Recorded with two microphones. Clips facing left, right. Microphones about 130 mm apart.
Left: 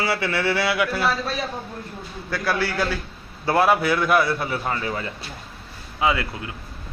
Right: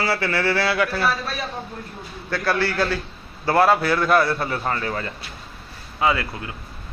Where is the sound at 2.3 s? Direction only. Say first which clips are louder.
Right 2 dB; 10° left (ahead or behind).